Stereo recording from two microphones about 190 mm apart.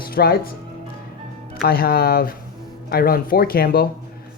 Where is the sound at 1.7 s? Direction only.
55° left (ahead or behind).